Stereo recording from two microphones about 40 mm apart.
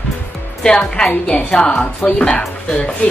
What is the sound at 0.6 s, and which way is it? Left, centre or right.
A woman's voice, centre.